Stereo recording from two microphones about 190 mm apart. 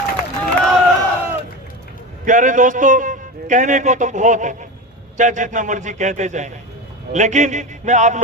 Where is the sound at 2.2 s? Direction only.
40° right (ahead or behind).